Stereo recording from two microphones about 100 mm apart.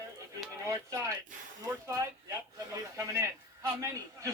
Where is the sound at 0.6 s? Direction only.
30° right (ahead or behind).